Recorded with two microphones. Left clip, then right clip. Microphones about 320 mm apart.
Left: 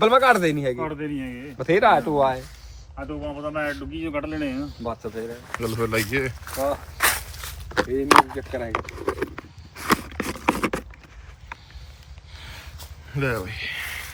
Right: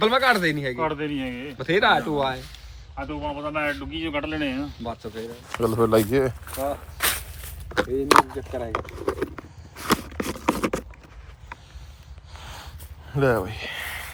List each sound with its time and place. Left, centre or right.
0.0 s speech: left
0.8 s speech: centre
1.5 s speech: left
2.9 s speech: centre
5.5 s speech: centre
7.0 s walk: centre
7.7 s speech: centre
8.4 s speech: left
8.7 s a sound: centre
12.4 s a sound: centre
13.1 s speech: centre